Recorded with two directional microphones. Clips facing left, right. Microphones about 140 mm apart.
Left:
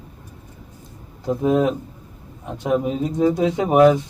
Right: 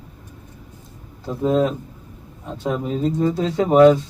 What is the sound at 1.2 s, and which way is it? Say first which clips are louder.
Speech: left 1 dB; 15° left (ahead or behind).